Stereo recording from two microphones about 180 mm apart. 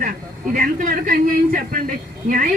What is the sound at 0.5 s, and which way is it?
A woman's voice, 50° right (ahead or behind).